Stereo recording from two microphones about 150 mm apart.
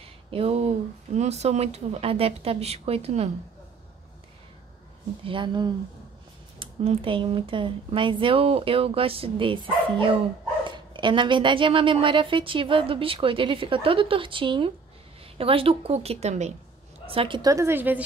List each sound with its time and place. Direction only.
0.3 s speech: 40° right (ahead or behind)
5.2 s speech: 35° right (ahead or behind)
17.0 s a woman's voice: 40° right (ahead or behind)
17.4 s a woman's voice: 20° right (ahead or behind)